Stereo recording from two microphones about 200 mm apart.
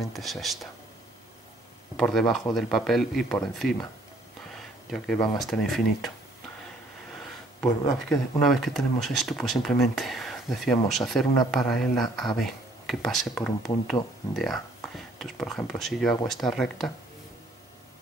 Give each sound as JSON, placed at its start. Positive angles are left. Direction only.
{"t": 0.0, "sound": "speech", "side_deg": 0}
{"t": 2.0, "sound": "speech", "side_deg": 0}
{"t": 4.9, "sound": "speech", "side_deg": 5}
{"t": 8.1, "sound": "speech", "side_deg": 0}